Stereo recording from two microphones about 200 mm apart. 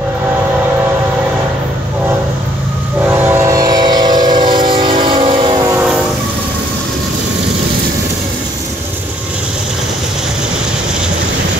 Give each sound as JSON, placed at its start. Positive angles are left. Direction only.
{"t": 3.1, "sound": "train", "side_deg": -10}